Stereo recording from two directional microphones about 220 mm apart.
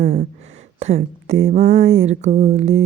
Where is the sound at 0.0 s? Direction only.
30° right (ahead or behind).